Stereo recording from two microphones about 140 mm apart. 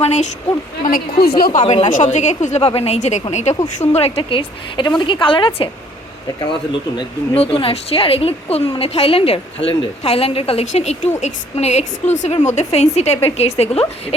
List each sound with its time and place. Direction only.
0.0 s speech: 55° left (ahead or behind)
0.9 s a woman's voice: 90° left
1.6 s a woman's voice: 40° left (ahead or behind)
1.9 s a woman's voice: 60° left (ahead or behind)
3.5 s speech: 30° left (ahead or behind)
3.9 s a woman's voice: 45° left (ahead or behind)
7.3 s a woman's voice: 45° left (ahead or behind)